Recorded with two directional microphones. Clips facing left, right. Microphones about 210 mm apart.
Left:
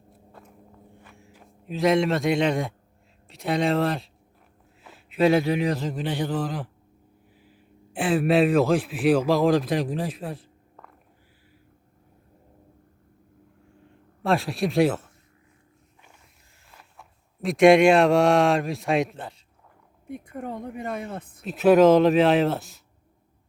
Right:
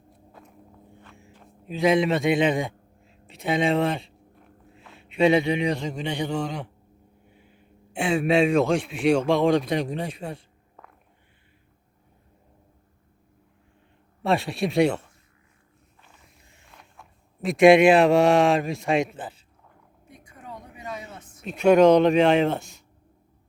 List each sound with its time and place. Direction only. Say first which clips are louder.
0.1 s walk: even; centre (ahead or behind)
1.1 s a man's voice: right 1 dB; 5° left (ahead or behind)
13.8 s speech: even; centre (ahead or behind)
16.6 s speech: even; centre (ahead or behind)
20.1 s a woman's voice: left 10 dB; 55° left (ahead or behind)
21.4 s speech: even; centre (ahead or behind)